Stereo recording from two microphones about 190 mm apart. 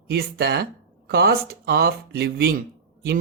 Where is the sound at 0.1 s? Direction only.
55° right (ahead or behind).